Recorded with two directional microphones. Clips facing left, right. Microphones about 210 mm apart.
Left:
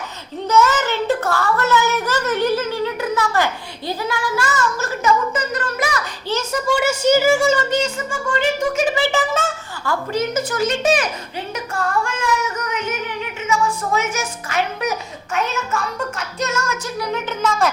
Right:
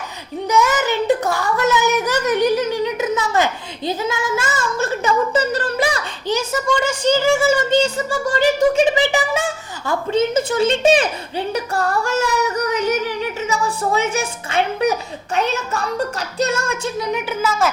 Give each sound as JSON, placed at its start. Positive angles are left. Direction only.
{"t": 0.4, "sound": "a child's voice", "side_deg": -15}
{"t": 6.2, "sound": "a child's voice", "side_deg": -15}
{"t": 6.7, "sound": "speech", "side_deg": 5}
{"t": 7.7, "sound": "a woman's voice", "side_deg": -35}
{"t": 9.0, "sound": "a woman's voice", "side_deg": -15}